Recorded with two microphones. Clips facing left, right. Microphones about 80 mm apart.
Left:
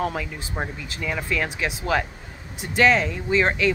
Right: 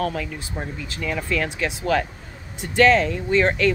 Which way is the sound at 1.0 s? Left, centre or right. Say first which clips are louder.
Right 1 dB; centre.